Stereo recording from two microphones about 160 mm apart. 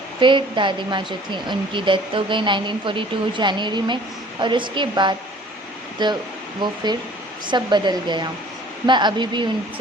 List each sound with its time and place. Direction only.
0.2 s a woman's voice: 30° right (ahead or behind)
7.4 s a woman's voice: 30° right (ahead or behind)